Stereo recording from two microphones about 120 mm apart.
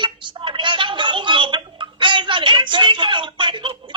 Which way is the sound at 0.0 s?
40° right (ahead or behind).